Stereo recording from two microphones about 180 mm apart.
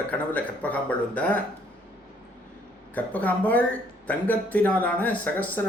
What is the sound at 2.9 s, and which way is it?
Speech, 10° left (ahead or behind).